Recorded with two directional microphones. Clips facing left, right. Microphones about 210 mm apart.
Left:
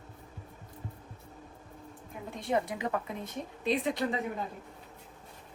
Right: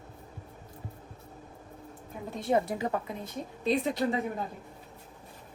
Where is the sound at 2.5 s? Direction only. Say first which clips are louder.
Right 3 dB; 35° right (ahead or behind).